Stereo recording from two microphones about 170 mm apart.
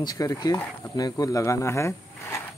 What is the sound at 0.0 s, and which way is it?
Speech, 20° left (ahead or behind).